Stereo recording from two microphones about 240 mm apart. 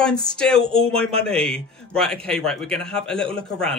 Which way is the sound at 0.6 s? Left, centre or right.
Right.